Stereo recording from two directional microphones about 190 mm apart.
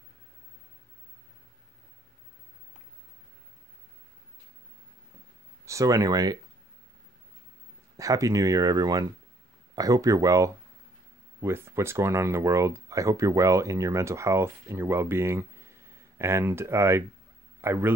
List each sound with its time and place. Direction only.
5.7 s speech: 15° right (ahead or behind)
8.0 s speech: 15° right (ahead or behind)